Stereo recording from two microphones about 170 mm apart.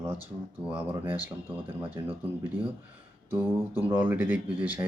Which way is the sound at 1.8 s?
30° right (ahead or behind).